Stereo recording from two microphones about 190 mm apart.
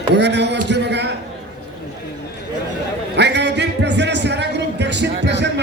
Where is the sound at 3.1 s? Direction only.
65° right (ahead or behind).